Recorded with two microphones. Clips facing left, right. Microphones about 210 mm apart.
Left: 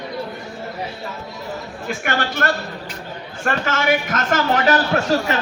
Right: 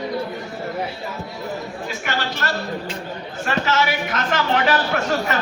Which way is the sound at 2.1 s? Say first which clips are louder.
Left 4 dB; 55° left (ahead or behind).